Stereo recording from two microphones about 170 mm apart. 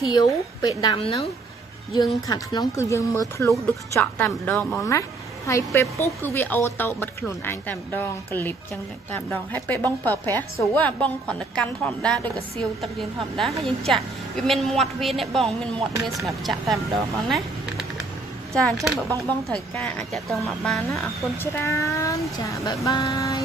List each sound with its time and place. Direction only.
0.1 s a woman's voice: 25° left (ahead or behind)
2.0 s speech: 25° left (ahead or behind); by 4.8 s 5° left (ahead or behind)
5.5 s speech: 15° left (ahead or behind)
13.4 s a woman's voice: centre (ahead or behind)
18.5 s a woman's voice: centre (ahead or behind)
20.9 s a woman's voice: 15° left (ahead or behind)